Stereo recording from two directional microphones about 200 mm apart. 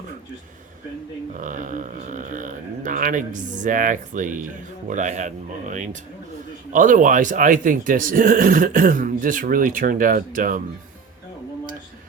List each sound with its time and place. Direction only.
1.3 s a man's voice: 40° right (ahead or behind)